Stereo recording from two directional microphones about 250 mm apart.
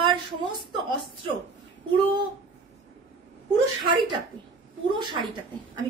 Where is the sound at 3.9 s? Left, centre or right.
Centre.